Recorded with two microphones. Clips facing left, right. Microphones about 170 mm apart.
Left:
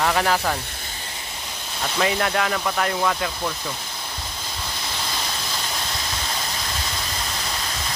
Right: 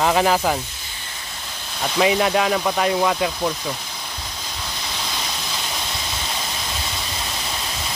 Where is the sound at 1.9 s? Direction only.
15° right (ahead or behind).